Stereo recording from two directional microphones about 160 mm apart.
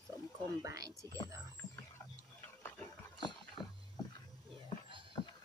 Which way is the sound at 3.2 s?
30° left (ahead or behind).